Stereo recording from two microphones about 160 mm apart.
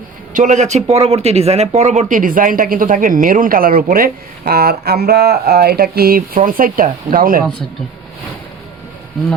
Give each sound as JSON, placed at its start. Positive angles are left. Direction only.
{"t": 0.3, "sound": "speech", "side_deg": -50}
{"t": 9.2, "sound": "speech", "side_deg": 0}